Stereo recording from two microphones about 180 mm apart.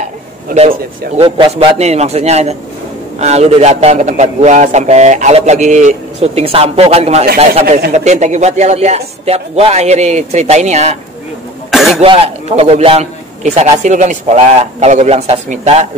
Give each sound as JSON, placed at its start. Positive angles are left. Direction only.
{"t": 1.1, "sound": "a man's voice", "side_deg": -30}
{"t": 11.7, "sound": "cough", "side_deg": 0}
{"t": 12.0, "sound": "a man's voice", "side_deg": -35}